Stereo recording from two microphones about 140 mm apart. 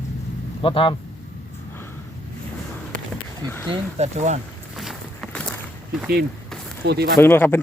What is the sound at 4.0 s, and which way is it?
Speech, 55° right (ahead or behind).